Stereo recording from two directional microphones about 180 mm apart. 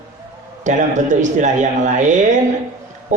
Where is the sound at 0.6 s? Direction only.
40° right (ahead or behind).